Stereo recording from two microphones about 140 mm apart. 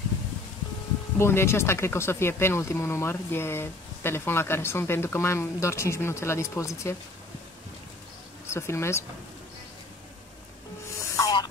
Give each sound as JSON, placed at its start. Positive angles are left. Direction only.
{"t": 1.1, "sound": "speech", "side_deg": 15}
{"t": 8.5, "sound": "speech", "side_deg": 20}
{"t": 11.0, "sound": "a sound", "side_deg": 25}